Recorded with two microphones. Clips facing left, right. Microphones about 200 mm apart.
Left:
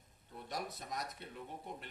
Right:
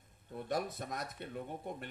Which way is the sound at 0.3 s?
50° right (ahead or behind).